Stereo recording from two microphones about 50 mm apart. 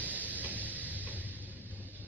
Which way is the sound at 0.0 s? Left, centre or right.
Right.